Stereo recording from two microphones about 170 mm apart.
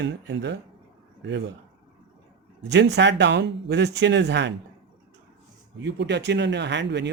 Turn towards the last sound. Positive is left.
turn(degrees=-90)